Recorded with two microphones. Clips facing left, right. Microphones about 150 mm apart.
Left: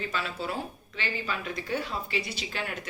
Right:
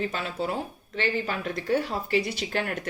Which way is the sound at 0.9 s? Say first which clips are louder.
Right 6 dB; 50° right (ahead or behind).